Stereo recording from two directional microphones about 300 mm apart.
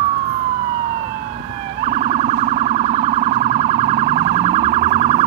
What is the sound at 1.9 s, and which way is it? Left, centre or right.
Emergency vehicle, right.